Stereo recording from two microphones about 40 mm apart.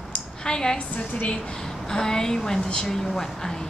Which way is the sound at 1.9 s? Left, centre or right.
Centre.